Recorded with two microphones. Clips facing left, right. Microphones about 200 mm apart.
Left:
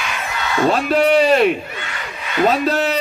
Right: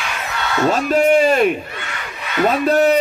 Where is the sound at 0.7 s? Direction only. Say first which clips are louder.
Right 1 dB; 45° right (ahead or behind).